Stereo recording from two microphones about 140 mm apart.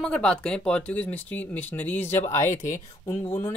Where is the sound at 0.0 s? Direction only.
5° left (ahead or behind).